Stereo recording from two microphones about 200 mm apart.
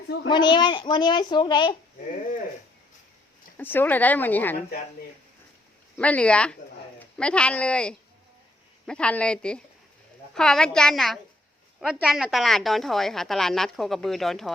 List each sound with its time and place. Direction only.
0.3 s a woman's voice: 20° left (ahead or behind)
3.6 s speech: 10° left (ahead or behind)
6.0 s a woman's voice: 5° left (ahead or behind)